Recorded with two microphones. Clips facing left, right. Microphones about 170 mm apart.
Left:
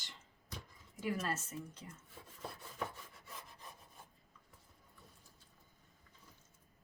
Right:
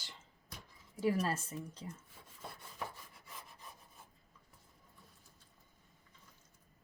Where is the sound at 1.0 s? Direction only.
30° right (ahead or behind).